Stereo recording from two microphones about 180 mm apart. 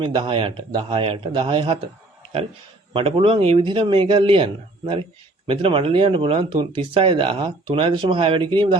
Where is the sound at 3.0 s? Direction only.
30° right (ahead or behind).